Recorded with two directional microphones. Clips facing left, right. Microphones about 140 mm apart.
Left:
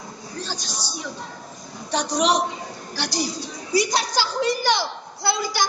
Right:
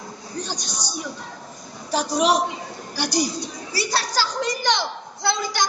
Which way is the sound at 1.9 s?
5° right (ahead or behind).